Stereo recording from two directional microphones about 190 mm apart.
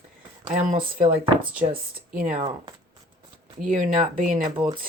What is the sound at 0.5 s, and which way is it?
Speech, 40° right (ahead or behind).